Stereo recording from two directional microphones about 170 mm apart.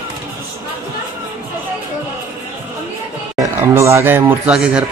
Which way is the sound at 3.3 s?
15° right (ahead or behind).